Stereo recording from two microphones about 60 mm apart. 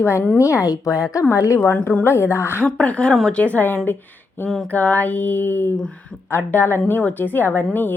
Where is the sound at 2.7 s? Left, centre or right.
Centre.